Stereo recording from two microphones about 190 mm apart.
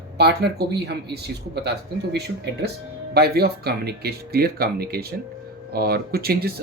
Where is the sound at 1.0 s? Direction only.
60° right (ahead or behind).